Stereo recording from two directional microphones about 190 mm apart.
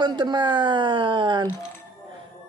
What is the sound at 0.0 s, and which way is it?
Speech, 25° right (ahead or behind).